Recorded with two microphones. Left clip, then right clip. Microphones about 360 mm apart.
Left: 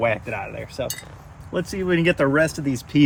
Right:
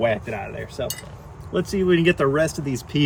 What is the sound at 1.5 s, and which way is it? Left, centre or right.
Speech, centre.